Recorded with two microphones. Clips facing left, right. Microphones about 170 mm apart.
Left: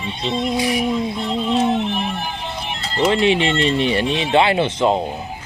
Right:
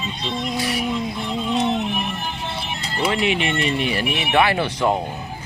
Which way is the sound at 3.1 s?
30° left (ahead or behind).